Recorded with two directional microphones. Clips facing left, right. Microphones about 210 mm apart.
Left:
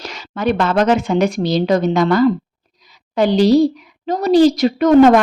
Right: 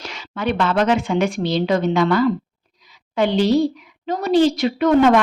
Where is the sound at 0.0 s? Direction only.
40° left (ahead or behind).